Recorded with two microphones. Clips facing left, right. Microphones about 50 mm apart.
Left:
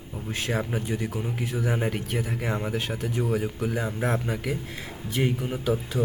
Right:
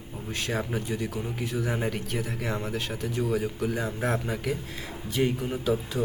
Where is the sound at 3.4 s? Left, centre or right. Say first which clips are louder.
Left 1 dB; centre.